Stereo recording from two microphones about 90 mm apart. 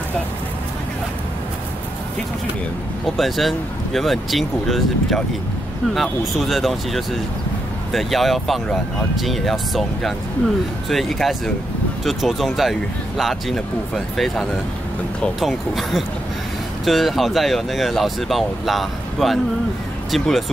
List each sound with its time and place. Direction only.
3.2 s speech: centre (ahead or behind)
15.4 s speech: centre (ahead or behind)